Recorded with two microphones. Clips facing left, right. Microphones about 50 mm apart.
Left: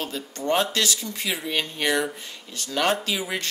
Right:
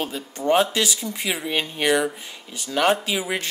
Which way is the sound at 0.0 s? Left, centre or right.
Centre.